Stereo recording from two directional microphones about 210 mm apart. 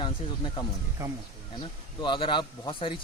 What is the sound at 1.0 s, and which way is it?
Speech, 15° right (ahead or behind).